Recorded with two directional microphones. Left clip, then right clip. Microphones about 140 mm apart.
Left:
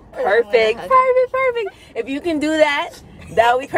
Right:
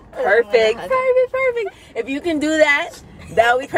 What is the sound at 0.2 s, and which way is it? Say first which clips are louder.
A woman's voice: even; 30° left (ahead or behind).